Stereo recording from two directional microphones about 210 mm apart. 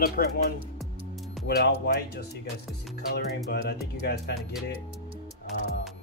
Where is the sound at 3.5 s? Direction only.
50° left (ahead or behind).